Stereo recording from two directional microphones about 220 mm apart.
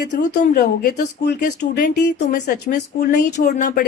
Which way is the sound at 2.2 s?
35° left (ahead or behind).